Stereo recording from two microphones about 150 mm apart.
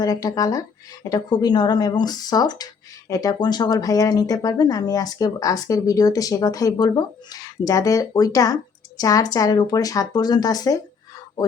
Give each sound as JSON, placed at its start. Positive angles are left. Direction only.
{"t": 0.0, "sound": "speech", "side_deg": 25}